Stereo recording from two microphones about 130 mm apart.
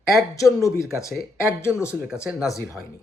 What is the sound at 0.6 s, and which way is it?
Speech, 25° left (ahead or behind).